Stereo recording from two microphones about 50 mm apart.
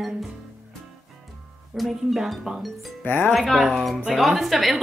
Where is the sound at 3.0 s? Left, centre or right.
Left.